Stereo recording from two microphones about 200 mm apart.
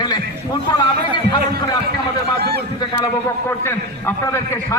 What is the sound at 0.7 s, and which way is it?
Speech, 20° left (ahead or behind).